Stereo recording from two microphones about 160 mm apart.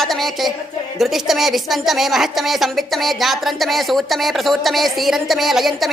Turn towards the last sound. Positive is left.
turn(degrees=0)  # may be behind; listen again after turning